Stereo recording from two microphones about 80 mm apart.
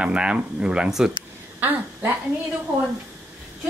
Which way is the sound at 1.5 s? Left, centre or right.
Right.